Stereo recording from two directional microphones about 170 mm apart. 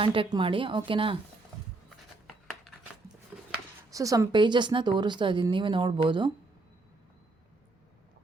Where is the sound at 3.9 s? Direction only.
20° right (ahead or behind).